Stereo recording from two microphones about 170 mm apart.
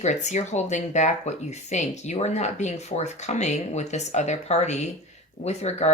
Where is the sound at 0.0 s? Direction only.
45° left (ahead or behind).